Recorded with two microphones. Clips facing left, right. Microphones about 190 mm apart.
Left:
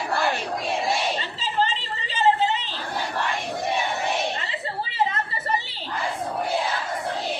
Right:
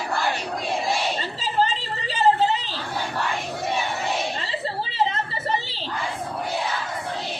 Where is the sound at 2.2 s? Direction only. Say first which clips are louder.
Right 1 dB; 35° right (ahead or behind).